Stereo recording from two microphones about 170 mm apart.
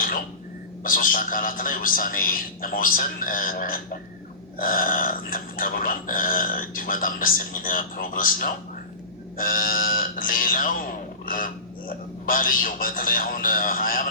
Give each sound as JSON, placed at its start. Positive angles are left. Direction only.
{"t": 0.9, "sound": "speech", "side_deg": 55}